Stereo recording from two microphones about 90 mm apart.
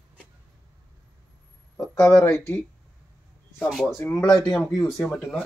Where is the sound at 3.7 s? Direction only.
5° right (ahead or behind).